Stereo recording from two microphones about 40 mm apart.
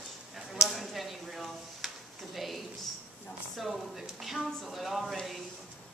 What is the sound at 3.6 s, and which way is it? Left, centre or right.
Speech, centre.